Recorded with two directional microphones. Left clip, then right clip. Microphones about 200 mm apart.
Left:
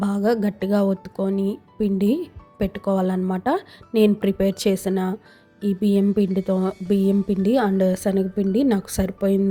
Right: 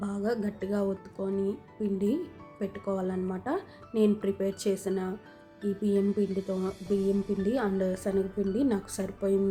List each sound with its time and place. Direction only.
0.0 s speech: 40° left (ahead or behind)